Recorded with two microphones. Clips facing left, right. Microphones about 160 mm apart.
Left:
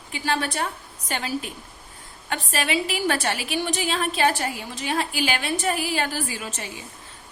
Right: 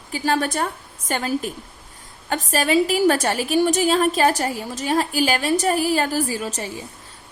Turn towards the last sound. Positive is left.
turn(degrees=-40)  # may be behind; listen again after turning